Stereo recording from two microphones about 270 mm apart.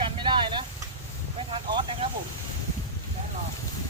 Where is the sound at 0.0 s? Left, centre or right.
Centre.